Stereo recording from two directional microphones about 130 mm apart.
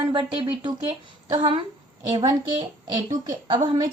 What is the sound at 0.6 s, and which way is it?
A woman's voice, 35° right (ahead or behind).